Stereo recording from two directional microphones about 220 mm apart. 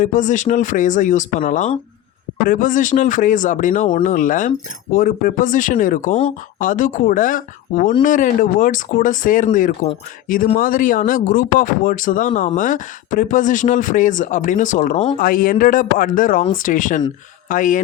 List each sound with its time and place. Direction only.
0.0 s speech: 35° left (ahead or behind)